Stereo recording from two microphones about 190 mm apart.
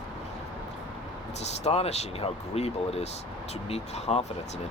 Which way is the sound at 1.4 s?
35° left (ahead or behind).